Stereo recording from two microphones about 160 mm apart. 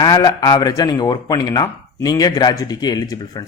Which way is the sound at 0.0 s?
25° left (ahead or behind).